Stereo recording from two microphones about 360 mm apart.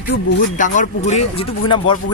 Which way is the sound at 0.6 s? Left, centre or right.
Centre.